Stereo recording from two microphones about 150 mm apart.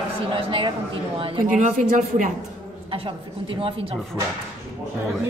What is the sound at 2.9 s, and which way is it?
A woman's voice, 35° right (ahead or behind).